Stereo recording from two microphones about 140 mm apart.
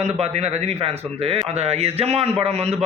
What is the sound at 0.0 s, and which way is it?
Speech, 50° right (ahead or behind).